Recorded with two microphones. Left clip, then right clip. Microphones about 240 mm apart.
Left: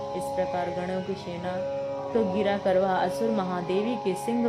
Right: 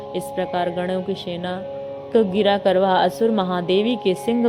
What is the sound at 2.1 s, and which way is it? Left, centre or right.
A woman's voice, right.